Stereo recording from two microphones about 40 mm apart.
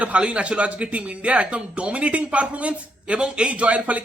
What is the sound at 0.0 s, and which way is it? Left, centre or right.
Speech, right.